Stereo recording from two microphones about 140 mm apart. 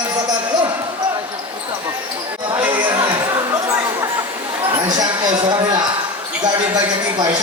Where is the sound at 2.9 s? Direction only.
20° right (ahead or behind).